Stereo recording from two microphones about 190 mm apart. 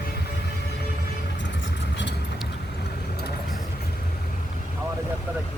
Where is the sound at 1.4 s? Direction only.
70° left (ahead or behind).